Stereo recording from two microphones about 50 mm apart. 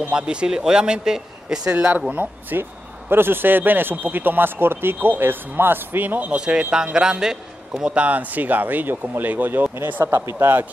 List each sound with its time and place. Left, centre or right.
0.1 s speech: centre
1.7 s speech: right
2.5 s speech: right
6.3 s speech: centre
7.8 s speech: right